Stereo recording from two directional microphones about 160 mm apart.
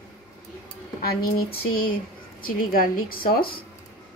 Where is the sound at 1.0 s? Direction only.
70° left (ahead or behind).